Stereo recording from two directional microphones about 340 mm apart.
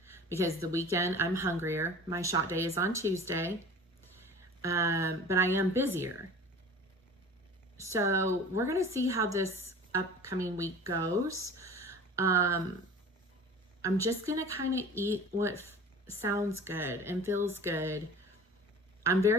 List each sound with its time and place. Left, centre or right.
0.0 s a sound: centre
0.9 s speech: centre
4.6 s speech: centre
7.9 s speech: centre
14.0 s speech: centre
15.5 s a sound: centre
16.2 s speech: centre
19.0 s speech: centre